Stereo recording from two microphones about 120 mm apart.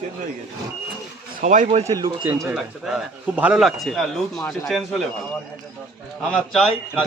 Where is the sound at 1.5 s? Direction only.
85° right.